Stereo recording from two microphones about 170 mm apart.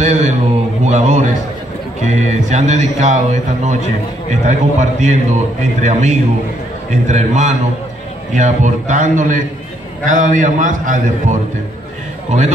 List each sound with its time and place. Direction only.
0.0 s mantra: 45° right (ahead or behind)
0.8 s a man's voice: 45° right (ahead or behind)